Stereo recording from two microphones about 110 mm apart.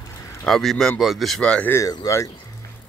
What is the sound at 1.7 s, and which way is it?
Speech, 30° left (ahead or behind).